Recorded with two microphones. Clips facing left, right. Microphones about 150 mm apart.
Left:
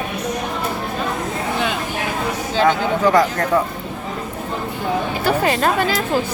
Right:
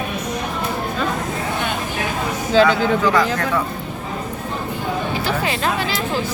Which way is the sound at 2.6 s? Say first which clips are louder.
Right 2 dB; 90° right.